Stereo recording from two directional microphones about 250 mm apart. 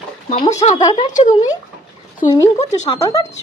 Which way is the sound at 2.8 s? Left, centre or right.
Centre.